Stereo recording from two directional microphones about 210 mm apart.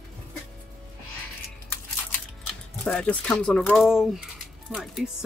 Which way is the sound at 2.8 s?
5° left (ahead or behind).